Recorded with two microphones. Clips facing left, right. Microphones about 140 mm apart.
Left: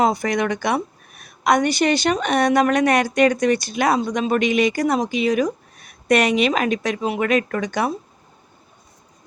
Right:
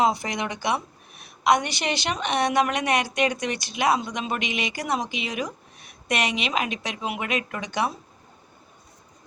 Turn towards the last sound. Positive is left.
turn(degrees=45)  # may be behind; listen again after turning